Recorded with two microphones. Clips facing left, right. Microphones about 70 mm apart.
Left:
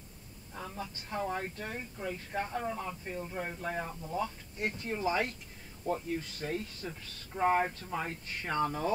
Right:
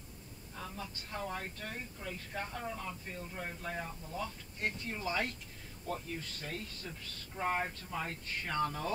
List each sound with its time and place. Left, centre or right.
0.6 s speech: centre